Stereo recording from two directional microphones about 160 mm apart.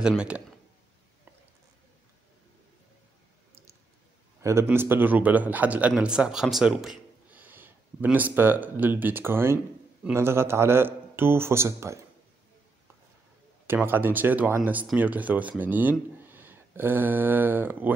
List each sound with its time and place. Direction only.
4.4 s a man's voice: 20° right (ahead or behind)
13.7 s speech: 15° right (ahead or behind)